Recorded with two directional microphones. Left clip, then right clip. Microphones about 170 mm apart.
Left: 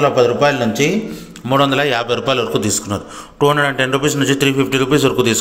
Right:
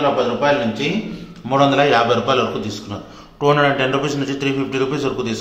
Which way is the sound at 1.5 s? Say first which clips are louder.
Even; 25° left (ahead or behind).